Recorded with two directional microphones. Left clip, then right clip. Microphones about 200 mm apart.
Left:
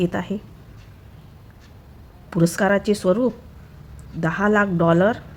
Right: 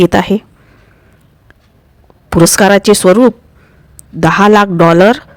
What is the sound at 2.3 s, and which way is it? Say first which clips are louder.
Speech: right 12 dB; 50° right (ahead or behind).